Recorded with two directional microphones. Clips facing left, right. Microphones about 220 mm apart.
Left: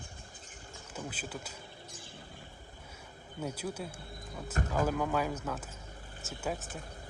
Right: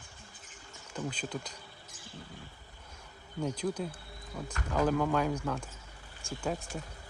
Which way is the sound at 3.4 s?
5° left (ahead or behind).